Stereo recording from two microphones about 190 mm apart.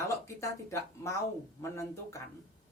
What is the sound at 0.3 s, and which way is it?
Speech, 15° left (ahead or behind).